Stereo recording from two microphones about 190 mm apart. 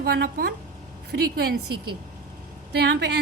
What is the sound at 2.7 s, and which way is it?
Speech, 60° right (ahead or behind).